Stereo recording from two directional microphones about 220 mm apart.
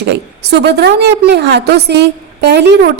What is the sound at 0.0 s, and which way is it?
A woman's voice, 50° right (ahead or behind).